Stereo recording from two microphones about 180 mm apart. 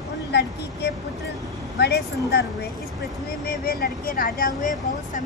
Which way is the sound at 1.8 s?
65° left (ahead or behind).